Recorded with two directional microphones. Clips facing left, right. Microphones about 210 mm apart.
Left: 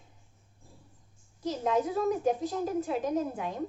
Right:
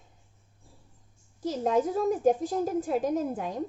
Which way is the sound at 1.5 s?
45° right (ahead or behind).